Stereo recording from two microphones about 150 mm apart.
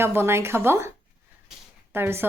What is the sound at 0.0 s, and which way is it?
Speech, 15° right (ahead or behind).